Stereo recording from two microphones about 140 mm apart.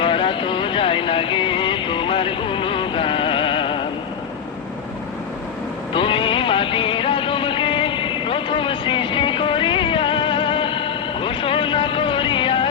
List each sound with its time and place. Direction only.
0.0 s vehicle: 40° left (ahead or behind)
5.9 s music: 40° left (ahead or behind)